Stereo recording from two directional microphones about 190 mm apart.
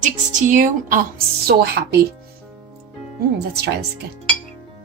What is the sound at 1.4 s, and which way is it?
Speech, 55° right (ahead or behind).